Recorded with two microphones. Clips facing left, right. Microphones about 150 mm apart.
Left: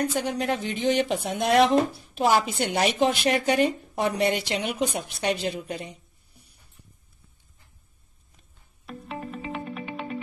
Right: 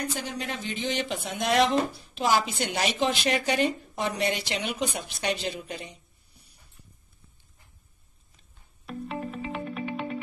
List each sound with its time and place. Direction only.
0.2 s speech: 55° left (ahead or behind)
8.8 s music: centre (ahead or behind)